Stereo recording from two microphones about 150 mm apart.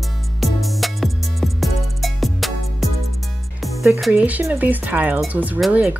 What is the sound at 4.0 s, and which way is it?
Speech, 10° right (ahead or behind).